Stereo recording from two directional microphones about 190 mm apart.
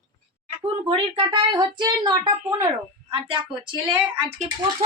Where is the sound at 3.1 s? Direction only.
30° right (ahead or behind).